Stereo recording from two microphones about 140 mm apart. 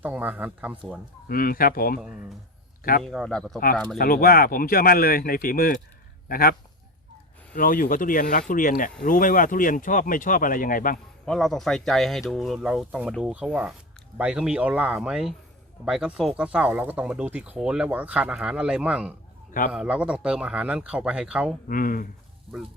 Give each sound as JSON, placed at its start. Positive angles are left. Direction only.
{"t": 0.0, "sound": "speech", "side_deg": -10}
{"t": 1.3, "sound": "speech", "side_deg": 90}
{"t": 3.0, "sound": "speech", "side_deg": 0}
{"t": 3.9, "sound": "speech", "side_deg": 90}
{"t": 11.3, "sound": "speech", "side_deg": 0}
{"t": 19.5, "sound": "a man's voice", "side_deg": 75}
{"t": 19.7, "sound": "speech", "side_deg": -5}
{"t": 21.7, "sound": "speech", "side_deg": 80}